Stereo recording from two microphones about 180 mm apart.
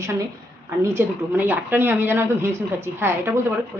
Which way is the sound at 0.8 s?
10° right (ahead or behind).